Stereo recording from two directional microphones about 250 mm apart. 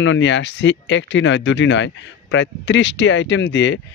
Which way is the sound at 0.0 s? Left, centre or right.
Left.